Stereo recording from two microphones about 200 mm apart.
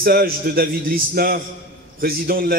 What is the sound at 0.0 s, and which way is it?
A man's voice, 45° right (ahead or behind).